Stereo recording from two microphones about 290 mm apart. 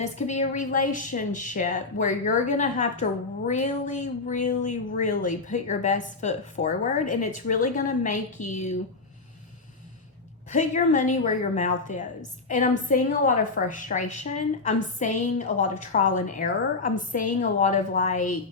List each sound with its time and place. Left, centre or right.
0.2 s speech: left
10.5 s speech: left